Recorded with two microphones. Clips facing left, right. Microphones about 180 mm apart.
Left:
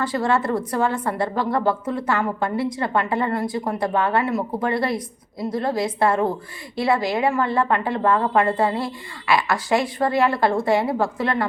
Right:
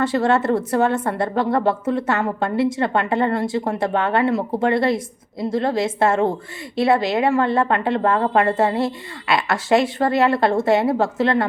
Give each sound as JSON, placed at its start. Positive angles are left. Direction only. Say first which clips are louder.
{"t": 0.0, "sound": "a woman's voice", "louder": "right 3 dB", "side_deg": -25}